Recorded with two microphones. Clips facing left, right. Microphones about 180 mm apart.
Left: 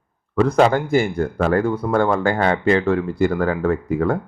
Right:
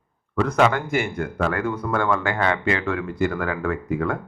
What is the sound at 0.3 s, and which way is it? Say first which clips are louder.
A man's voice: left 4 dB; 30° left (ahead or behind).